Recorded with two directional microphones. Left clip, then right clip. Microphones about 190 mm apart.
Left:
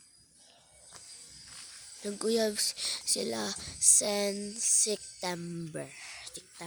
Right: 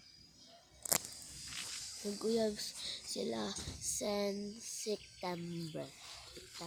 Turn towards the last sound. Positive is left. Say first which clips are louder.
# left 4 dB
turn(degrees=25)  # may be behind; listen again after turning